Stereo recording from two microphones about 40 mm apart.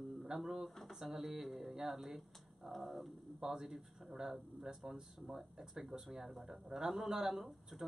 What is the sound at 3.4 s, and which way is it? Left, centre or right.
Speech, centre.